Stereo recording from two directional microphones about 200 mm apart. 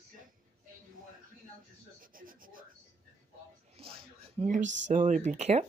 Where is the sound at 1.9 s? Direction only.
45° right (ahead or behind).